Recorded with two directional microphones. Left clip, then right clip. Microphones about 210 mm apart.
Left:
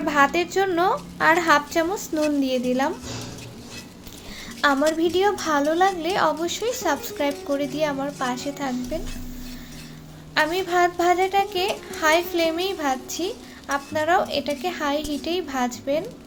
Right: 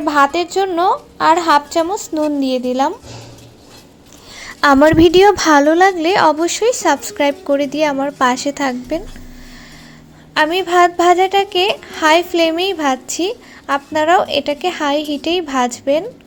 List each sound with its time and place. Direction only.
0.0 s a woman's voice: 25° right (ahead or behind)
4.4 s a woman's voice: 45° right (ahead or behind)
10.3 s a woman's voice: 35° right (ahead or behind)